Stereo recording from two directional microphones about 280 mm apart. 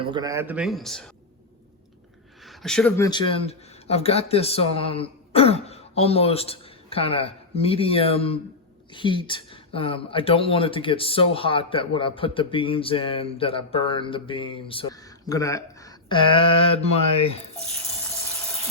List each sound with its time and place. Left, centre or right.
0.0 s speech: centre
2.4 s speech: centre
3.1 s speech: centre